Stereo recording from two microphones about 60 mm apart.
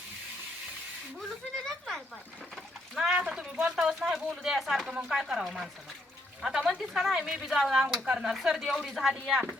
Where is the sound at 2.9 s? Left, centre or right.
Centre.